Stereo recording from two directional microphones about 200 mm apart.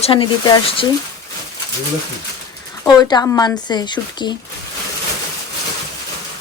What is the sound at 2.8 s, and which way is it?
Speech, 20° left (ahead or behind).